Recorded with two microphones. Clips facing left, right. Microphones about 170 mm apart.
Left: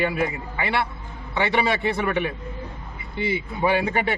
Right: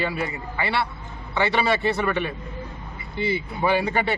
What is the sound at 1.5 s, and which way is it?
A man's voice, 15° left (ahead or behind).